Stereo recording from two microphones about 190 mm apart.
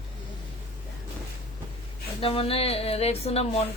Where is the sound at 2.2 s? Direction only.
30° left (ahead or behind).